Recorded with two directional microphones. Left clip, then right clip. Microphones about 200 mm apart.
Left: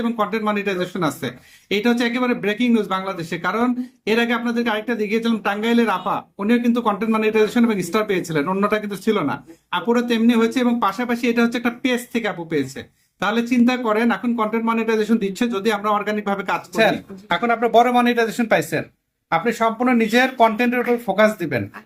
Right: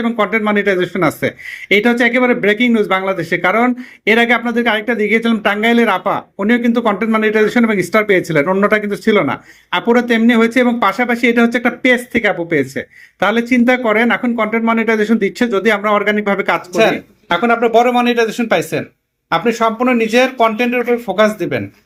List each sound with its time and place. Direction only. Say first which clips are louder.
0.0 s speech: right 6 dB; 20° right (ahead or behind)
16.7 s speech: right 3 dB; centre (ahead or behind)